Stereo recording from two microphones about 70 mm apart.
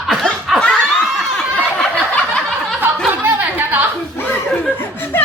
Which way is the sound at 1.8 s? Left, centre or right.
Centre.